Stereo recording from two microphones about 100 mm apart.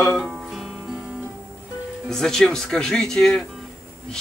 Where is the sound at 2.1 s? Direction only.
5° left (ahead or behind).